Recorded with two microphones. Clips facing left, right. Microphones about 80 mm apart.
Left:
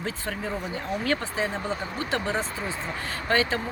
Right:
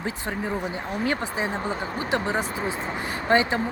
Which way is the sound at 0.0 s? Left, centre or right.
Centre.